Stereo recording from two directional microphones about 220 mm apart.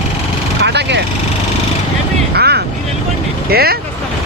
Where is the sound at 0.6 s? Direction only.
50° right (ahead or behind).